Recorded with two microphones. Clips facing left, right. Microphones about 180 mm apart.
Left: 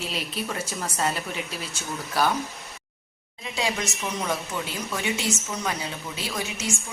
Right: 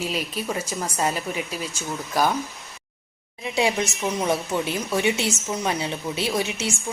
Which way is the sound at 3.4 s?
25° right (ahead or behind).